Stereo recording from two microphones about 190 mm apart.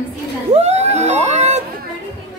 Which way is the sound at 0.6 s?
35° right (ahead or behind).